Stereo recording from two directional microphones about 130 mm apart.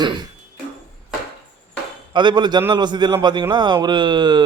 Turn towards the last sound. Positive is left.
turn(degrees=-35)  # may be behind; listen again after turning